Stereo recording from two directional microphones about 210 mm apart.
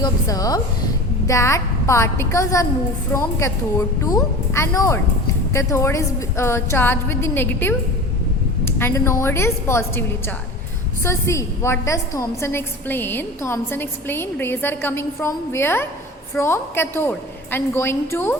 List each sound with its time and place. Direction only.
0.0 s a woman's voice: 15° left (ahead or behind)